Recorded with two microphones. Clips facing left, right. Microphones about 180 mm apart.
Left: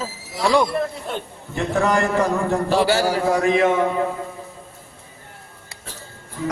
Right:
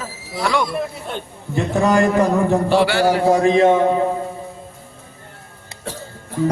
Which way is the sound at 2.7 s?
40° left (ahead or behind).